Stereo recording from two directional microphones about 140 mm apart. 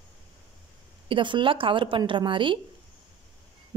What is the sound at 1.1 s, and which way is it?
A woman's voice, 35° right (ahead or behind).